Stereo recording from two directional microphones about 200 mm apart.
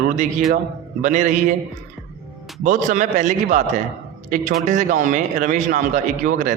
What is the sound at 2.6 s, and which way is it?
A man's voice, 40° right (ahead or behind).